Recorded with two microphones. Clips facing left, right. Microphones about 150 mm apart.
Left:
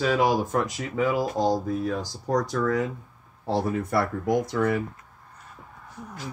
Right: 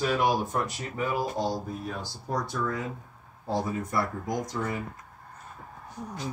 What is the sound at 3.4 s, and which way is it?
Speech, 70° left (ahead or behind).